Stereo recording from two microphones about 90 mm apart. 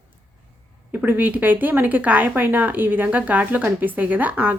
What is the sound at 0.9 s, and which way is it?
A woman's voice, 20° right (ahead or behind).